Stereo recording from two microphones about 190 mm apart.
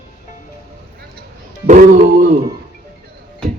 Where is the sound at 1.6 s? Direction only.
40° right (ahead or behind).